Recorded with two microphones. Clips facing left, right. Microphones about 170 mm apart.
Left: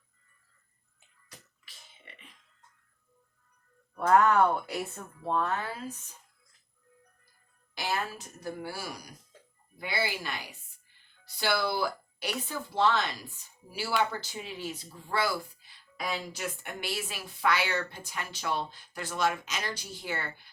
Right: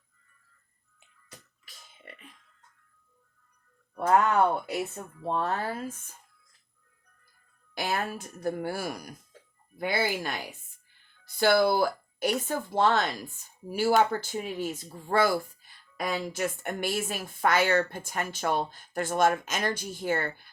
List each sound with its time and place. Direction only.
3.9 s speech: 25° right (ahead or behind)
5.3 s speech: 35° right (ahead or behind)
7.8 s speech: 50° right (ahead or behind)